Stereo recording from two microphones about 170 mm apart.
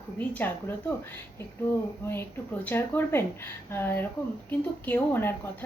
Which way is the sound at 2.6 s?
10° left (ahead or behind).